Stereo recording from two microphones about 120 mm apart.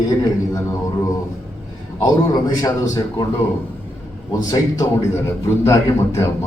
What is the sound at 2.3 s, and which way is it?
Speech, 30° left (ahead or behind).